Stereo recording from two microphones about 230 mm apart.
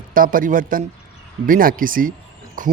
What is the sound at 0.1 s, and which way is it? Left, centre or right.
Speech, right.